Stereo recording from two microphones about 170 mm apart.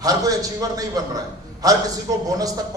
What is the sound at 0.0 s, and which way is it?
A man's voice, 20° right (ahead or behind).